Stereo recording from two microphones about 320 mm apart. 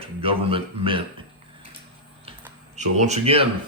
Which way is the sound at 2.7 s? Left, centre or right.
Right.